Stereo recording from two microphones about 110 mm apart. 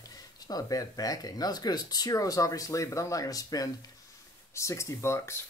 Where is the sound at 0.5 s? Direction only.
35° left (ahead or behind).